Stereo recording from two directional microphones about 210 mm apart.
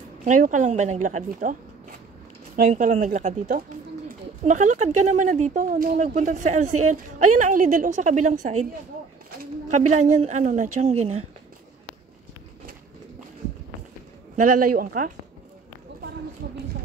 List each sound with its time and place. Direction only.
0.2 s speech: 35° right (ahead or behind)
9.7 s speech: 35° right (ahead or behind)
14.3 s speech: 40° right (ahead or behind)